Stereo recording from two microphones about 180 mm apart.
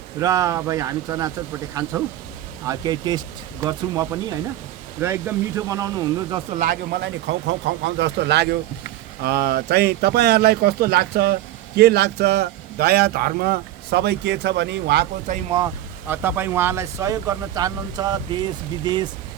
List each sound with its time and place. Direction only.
0.2 s speech: 15° right (ahead or behind)
6.6 s speech: 50° right (ahead or behind)
7.0 s a man's voice: 90° right
15.5 s speech: 15° right (ahead or behind)